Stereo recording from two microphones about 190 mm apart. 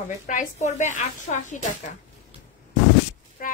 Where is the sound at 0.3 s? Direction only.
40° left (ahead or behind).